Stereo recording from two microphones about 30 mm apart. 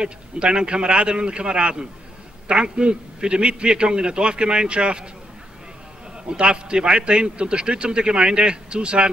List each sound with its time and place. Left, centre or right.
0.0 s a man's voice: right
6.3 s a man's voice: right